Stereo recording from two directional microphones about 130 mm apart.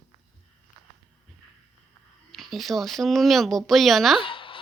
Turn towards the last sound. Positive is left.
turn(degrees=40)  # may be behind; listen again after turning